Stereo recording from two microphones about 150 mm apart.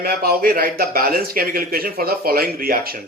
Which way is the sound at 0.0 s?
90° right.